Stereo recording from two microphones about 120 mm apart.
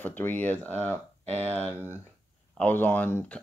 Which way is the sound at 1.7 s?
15° right (ahead or behind).